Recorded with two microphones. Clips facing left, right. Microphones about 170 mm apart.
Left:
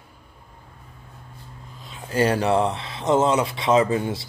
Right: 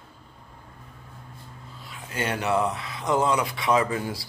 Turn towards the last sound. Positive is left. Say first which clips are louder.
# left 4 dB
turn(degrees=25)  # may be behind; listen again after turning